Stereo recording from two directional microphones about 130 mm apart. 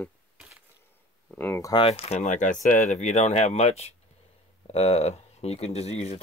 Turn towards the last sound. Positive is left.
turn(degrees=55)  # may be behind; listen again after turning